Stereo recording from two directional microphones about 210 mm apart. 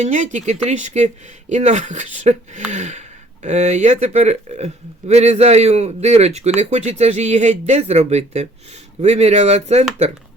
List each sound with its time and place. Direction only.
0.0 s speech: 35° right (ahead or behind)